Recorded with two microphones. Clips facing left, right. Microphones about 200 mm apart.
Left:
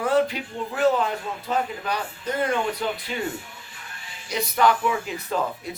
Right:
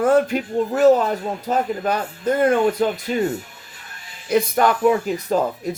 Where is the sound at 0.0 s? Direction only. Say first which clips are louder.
Right 5 dB; 50° right (ahead or behind).